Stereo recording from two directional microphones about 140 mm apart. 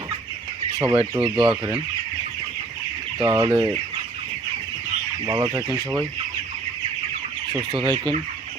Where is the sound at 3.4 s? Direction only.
40° right (ahead or behind).